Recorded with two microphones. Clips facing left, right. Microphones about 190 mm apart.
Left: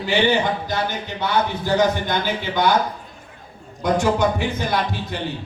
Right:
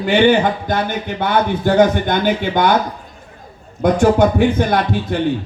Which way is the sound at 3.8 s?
55° right (ahead or behind).